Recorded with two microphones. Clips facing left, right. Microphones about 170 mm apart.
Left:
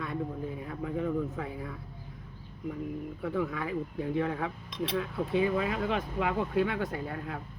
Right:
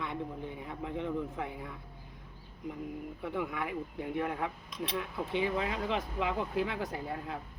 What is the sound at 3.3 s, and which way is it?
Speech, 20° right (ahead or behind).